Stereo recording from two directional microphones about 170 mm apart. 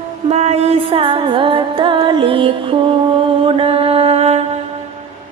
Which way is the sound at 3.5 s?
35° right (ahead or behind).